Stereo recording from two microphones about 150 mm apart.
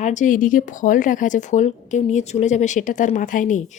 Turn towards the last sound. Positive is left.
turn(degrees=60)  # may be behind; listen again after turning